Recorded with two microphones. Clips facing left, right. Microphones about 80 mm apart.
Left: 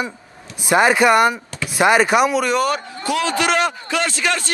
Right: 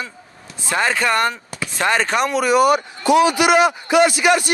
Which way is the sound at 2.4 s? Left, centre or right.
Centre.